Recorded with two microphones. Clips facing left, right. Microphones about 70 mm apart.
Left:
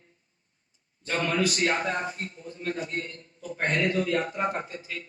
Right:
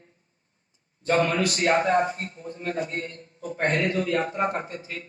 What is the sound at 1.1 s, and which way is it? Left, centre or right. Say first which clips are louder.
A man's voice: right 4 dB; right.